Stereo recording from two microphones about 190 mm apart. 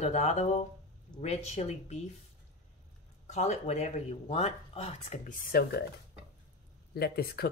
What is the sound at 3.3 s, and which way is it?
Speech, 35° left (ahead or behind).